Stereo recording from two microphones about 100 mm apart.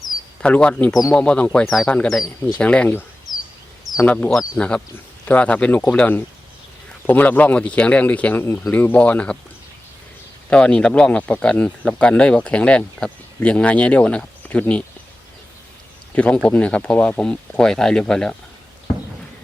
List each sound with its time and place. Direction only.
0.4 s speech: 10° left (ahead or behind)
2.6 s speech: 10° left (ahead or behind)
4.0 s speech: 15° left (ahead or behind)
10.5 s speech: 10° left (ahead or behind)
16.1 s speech: 10° left (ahead or behind)